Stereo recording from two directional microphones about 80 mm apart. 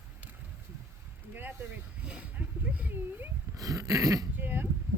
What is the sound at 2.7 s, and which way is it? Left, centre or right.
Speech, right.